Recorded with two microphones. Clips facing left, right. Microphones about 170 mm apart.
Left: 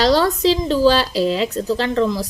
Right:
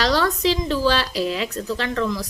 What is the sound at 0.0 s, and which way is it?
A woman's voice, 30° left (ahead or behind).